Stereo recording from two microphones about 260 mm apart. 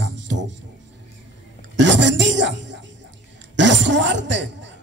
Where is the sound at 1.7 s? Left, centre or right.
Right.